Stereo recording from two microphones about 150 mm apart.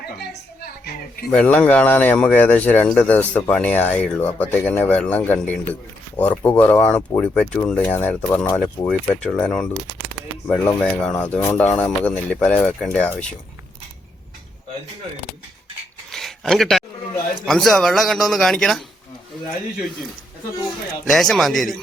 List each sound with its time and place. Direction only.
0.0 s a woman's voice: 90° left
1.3 s speech: 10° left (ahead or behind)
16.1 s a sound: centre (ahead or behind)
17.4 s speech: 5° left (ahead or behind)
21.1 s speech: centre (ahead or behind)